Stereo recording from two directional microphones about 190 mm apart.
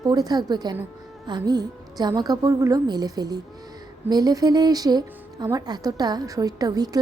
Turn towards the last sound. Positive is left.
turn(degrees=-20)  # may be behind; listen again after turning